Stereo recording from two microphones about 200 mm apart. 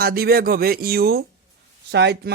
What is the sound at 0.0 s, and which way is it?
Speech, 50° right (ahead or behind).